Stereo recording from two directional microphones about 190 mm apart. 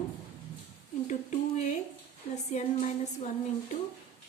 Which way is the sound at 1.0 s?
40° left (ahead or behind).